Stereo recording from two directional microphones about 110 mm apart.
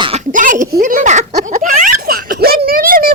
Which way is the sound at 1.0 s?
90° right.